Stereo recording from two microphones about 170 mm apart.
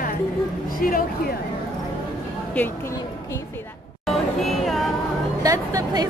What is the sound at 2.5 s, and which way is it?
Speech, 10° left (ahead or behind).